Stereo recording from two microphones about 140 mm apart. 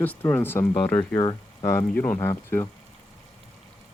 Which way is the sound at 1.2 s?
30° left (ahead or behind).